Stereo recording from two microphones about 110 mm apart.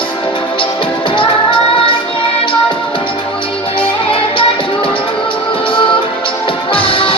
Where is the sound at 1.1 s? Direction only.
55° left (ahead or behind).